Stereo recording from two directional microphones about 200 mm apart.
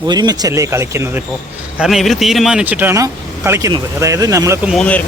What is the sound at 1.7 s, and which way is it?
Speech, 5° right (ahead or behind).